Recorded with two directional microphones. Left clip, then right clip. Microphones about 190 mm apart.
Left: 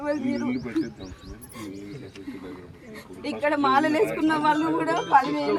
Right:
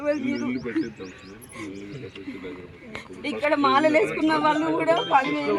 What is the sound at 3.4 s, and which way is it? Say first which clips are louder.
A woman's voice: right 2 dB; 10° right (ahead or behind).